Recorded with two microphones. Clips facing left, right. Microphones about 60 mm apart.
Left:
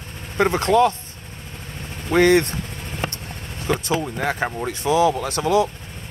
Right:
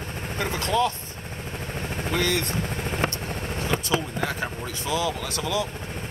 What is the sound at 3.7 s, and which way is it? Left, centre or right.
Vehicle, left.